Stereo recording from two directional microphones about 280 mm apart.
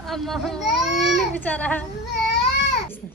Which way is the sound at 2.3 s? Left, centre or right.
Left.